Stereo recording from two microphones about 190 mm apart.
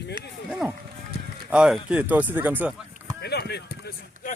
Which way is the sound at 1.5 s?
5° right (ahead or behind).